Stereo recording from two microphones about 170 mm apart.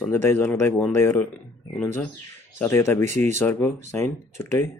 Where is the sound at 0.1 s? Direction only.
15° left (ahead or behind).